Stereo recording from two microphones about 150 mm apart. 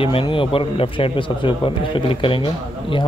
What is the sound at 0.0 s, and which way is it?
Speech, 35° left (ahead or behind).